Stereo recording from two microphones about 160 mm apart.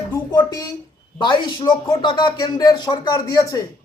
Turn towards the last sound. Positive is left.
turn(degrees=25)  # may be behind; listen again after turning